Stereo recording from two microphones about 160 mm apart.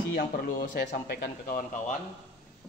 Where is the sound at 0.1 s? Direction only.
75° left (ahead or behind).